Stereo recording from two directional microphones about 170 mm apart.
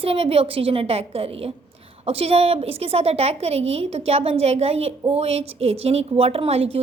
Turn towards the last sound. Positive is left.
turn(degrees=-35)  # may be behind; listen again after turning